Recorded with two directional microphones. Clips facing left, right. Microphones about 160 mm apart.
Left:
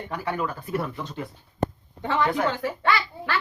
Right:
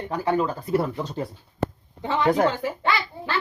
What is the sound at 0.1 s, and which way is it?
Speech, 25° right (ahead or behind).